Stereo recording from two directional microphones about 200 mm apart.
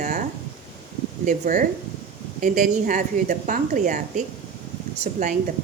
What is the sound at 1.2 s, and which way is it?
A woman's voice, 40° right (ahead or behind).